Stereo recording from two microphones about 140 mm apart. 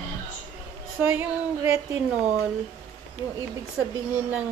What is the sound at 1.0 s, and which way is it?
A woman's voice, 15° right (ahead or behind).